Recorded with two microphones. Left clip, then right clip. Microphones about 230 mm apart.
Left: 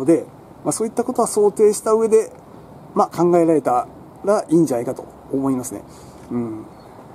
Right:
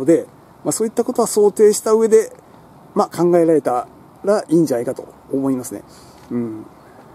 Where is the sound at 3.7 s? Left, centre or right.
Centre.